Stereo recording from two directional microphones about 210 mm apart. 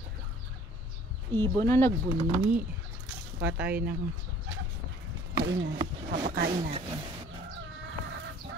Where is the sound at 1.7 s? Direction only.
10° left (ahead or behind).